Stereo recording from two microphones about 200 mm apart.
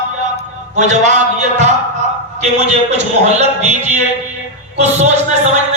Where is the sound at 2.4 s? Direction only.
35° right (ahead or behind).